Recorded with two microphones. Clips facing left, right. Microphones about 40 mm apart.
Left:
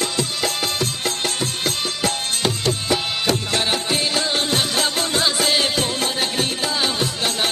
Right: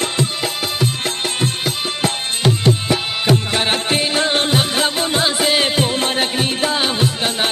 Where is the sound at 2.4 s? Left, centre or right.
Right.